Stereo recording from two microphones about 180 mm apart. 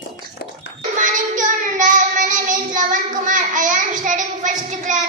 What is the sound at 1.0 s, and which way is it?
Child singing, 45° right (ahead or behind).